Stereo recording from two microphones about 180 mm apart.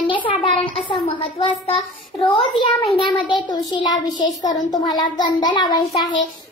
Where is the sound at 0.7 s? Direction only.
30° left (ahead or behind).